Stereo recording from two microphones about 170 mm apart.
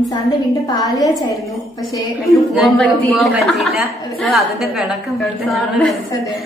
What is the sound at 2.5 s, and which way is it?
Speech, centre (ahead or behind).